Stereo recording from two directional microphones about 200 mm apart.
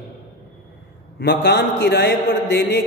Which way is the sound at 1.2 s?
55° left (ahead or behind).